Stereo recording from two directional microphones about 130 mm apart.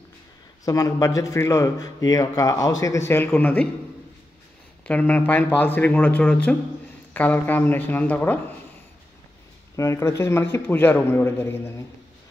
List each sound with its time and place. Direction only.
0.7 s a man's voice: 25° left (ahead or behind)
4.8 s speech: 10° left (ahead or behind)
9.8 s a man's voice: 25° left (ahead or behind)